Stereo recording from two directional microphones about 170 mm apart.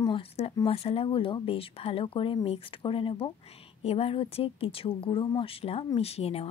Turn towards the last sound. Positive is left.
turn(degrees=35)  # may be behind; listen again after turning